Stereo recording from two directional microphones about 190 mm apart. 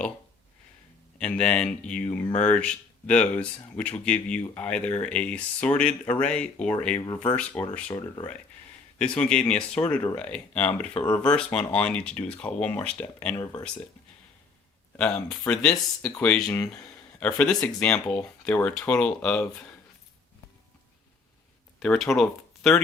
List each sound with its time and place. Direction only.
1.2 s speech: 5° left (ahead or behind)
7.9 s speech: 20° left (ahead or behind)
9.0 s speech: 5° left (ahead or behind)
14.9 s speech: 5° left (ahead or behind)
16.5 s speech: 20° left (ahead or behind)
16.8 s speech: 5° left (ahead or behind)
21.8 s speech: centre (ahead or behind)